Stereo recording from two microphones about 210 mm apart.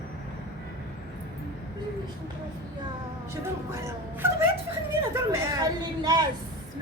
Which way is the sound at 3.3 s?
15° right (ahead or behind).